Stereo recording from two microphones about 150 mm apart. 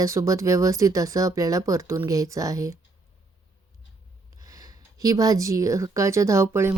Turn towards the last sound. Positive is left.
turn(degrees=-15)  # may be behind; listen again after turning